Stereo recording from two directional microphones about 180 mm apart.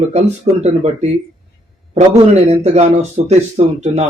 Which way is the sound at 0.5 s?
35° right (ahead or behind).